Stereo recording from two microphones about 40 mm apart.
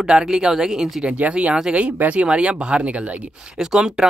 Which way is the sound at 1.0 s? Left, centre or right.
Right.